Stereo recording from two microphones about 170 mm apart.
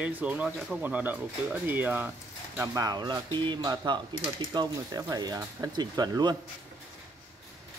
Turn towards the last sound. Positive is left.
turn(degrees=-25)  # may be behind; listen again after turning